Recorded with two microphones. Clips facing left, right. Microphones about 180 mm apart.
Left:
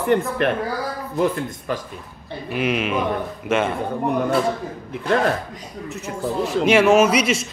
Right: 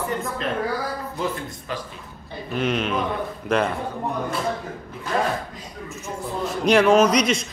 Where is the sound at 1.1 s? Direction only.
55° left (ahead or behind).